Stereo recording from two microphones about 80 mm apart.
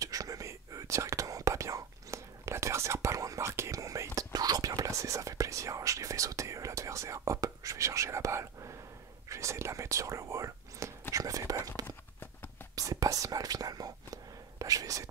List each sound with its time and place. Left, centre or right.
0.0 s whispering: right
11.8 s a sound: left
12.7 s whispering: right